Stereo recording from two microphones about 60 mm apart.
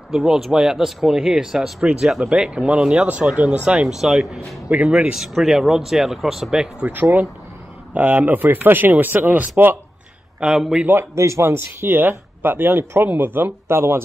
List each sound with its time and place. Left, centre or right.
0.1 s speech: centre
4.6 s speech: right
5.1 s speech: centre
6.5 s speech: centre
6.9 s speech: right
10.4 s speech: centre
11.0 s speech: right